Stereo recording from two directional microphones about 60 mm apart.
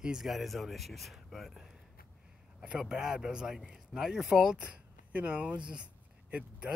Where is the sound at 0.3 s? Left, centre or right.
Centre.